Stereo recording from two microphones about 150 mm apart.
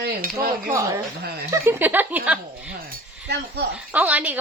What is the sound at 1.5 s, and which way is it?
A woman's voice, 15° right (ahead or behind).